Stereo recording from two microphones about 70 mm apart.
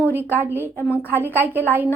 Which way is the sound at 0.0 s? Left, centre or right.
Right.